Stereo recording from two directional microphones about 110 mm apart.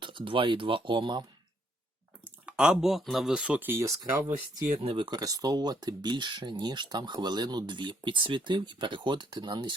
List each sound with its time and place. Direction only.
0.0 s speech: 50° right (ahead or behind)
2.2 s speech: 10° right (ahead or behind); by 4.3 s 25° right (ahead or behind)
4.8 s speech: 55° right (ahead or behind)
5.0 s speech: 35° right (ahead or behind)